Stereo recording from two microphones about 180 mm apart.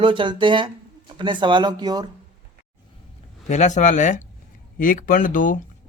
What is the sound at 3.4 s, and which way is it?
Speech, 40° left (ahead or behind).